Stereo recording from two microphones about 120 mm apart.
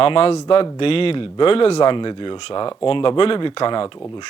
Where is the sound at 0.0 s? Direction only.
50° left (ahead or behind).